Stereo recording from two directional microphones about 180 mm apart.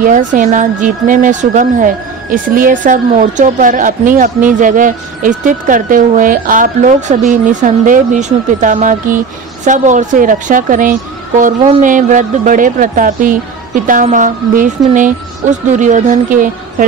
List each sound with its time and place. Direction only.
0.0 s speech: 45° right (ahead or behind)